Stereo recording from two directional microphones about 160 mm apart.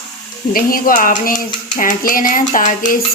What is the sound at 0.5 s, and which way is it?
Speech, 60° left (ahead or behind).